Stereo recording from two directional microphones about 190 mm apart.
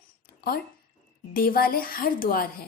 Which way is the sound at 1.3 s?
50° left (ahead or behind).